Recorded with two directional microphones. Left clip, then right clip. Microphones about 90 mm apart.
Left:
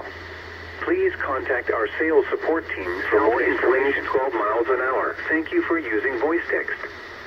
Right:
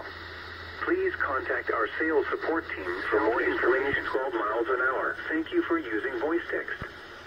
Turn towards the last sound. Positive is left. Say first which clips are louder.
# left 7 dB
turn(degrees=45)  # may be behind; listen again after turning